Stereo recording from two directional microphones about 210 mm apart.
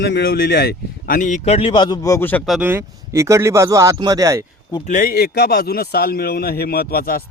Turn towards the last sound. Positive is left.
turn(degrees=45)  # may be behind; listen again after turning